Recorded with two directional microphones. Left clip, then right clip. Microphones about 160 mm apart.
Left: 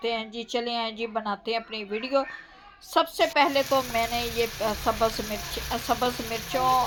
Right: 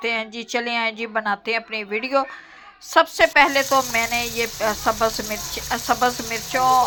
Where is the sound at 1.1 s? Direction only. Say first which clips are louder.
Right 8 dB; 25° right (ahead or behind).